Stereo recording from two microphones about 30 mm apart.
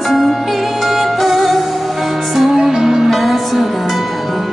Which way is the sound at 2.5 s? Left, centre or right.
Centre.